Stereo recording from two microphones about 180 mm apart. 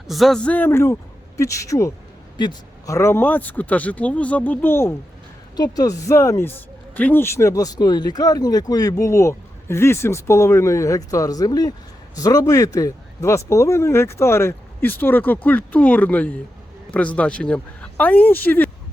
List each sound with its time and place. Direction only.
0.1 s speech: centre (ahead or behind)